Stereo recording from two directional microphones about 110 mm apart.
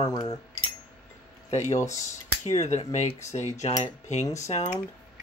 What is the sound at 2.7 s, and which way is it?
Cutlery, 90° left.